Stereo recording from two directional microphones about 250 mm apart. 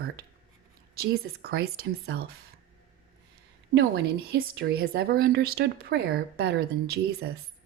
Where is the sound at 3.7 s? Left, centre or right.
Right.